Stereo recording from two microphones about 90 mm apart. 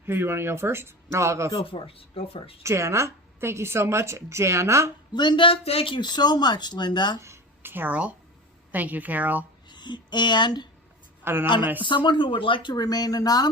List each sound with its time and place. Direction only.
0.0 s speech: 25° right (ahead or behind)
1.6 s speech: 85° left
2.6 s a woman's voice: 30° right (ahead or behind)
5.1 s speech: 55° left (ahead or behind)
7.2 s a woman's voice: 30° right (ahead or behind)
9.6 s speech: 55° left (ahead or behind)
11.2 s speech: 25° right (ahead or behind)
11.8 s speech: 60° left (ahead or behind)
12.7 s speech: 45° left (ahead or behind)